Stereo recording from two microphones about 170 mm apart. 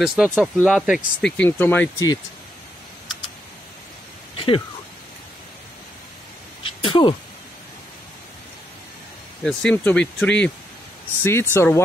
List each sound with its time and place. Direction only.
0.0 s speech: 5° right (ahead or behind)
1.3 s speech: 10° left (ahead or behind)
4.4 s speech: 30° left (ahead or behind)
6.6 s a sound: 30° left (ahead or behind)
9.4 s speech: 5° left (ahead or behind)